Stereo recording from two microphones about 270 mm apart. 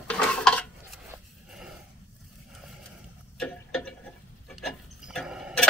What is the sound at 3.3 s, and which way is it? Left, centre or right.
Clock, centre.